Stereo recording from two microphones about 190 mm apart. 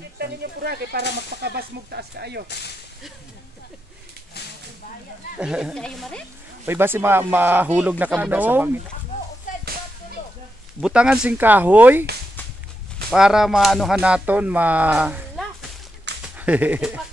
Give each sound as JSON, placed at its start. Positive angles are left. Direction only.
{"t": 0.2, "sound": "speech", "side_deg": -55}
{"t": 2.4, "sound": "speech", "side_deg": 60}
{"t": 5.4, "sound": "a woman's voice", "side_deg": -5}
{"t": 6.6, "sound": "speech", "side_deg": -10}
{"t": 9.5, "sound": "whip", "side_deg": 40}
{"t": 10.8, "sound": "speech", "side_deg": -5}
{"t": 13.1, "sound": "a woman's voice", "side_deg": -5}